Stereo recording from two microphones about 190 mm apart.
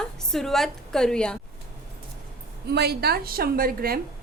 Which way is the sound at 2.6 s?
60° right (ahead or behind).